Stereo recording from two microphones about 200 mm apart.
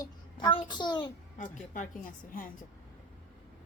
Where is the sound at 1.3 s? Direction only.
40° left (ahead or behind).